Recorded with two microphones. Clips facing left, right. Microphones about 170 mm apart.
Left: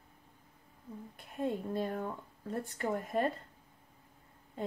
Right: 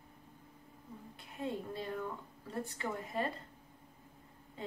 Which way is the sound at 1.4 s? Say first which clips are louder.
Left 5 dB; 50° left (ahead or behind).